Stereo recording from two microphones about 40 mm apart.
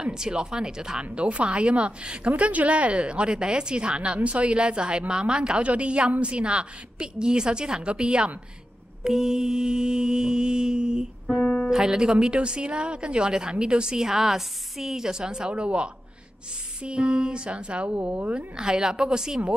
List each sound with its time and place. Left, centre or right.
0.0 s a woman's voice: centre
1.1 s a woman's voice: right
9.0 s a woman's voice: centre
11.4 s speech: centre
11.7 s a woman's voice: centre
18.6 s a woman's voice: centre